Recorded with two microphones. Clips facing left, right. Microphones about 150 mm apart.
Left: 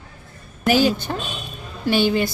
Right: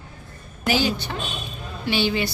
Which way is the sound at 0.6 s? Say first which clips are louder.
Left 5 dB; 45° left (ahead or behind).